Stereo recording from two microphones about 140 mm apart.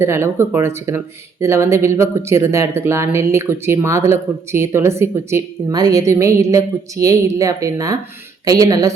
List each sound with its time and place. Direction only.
0.0 s speech: 15° right (ahead or behind)